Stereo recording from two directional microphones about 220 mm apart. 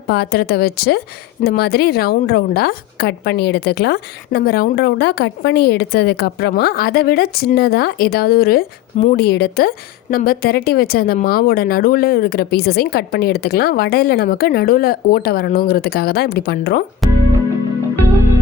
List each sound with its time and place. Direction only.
0.1 s speech: 45° left (ahead or behind)
17.0 s music: centre (ahead or behind)